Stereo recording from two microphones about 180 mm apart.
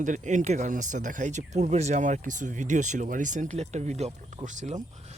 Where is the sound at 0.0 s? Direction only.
45° right (ahead or behind).